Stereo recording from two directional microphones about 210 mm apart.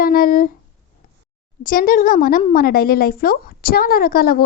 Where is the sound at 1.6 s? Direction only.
40° left (ahead or behind).